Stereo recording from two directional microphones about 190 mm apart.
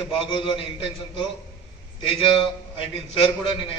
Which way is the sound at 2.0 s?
30° left (ahead or behind).